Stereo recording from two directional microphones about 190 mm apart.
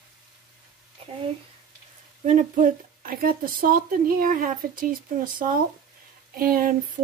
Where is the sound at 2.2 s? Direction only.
45° right (ahead or behind).